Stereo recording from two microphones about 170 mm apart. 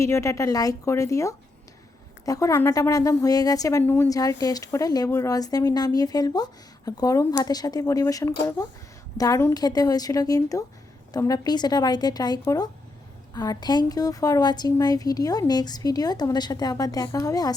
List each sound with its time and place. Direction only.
0.0 s a woman's voice: 15° left (ahead or behind)